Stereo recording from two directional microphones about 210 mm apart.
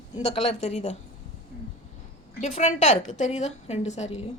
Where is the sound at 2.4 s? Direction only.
35° left (ahead or behind).